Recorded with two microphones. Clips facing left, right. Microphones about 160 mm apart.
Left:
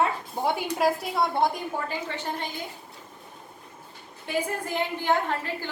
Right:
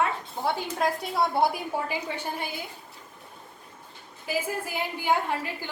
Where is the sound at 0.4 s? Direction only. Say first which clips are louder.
Left 2 dB; 20° left (ahead or behind).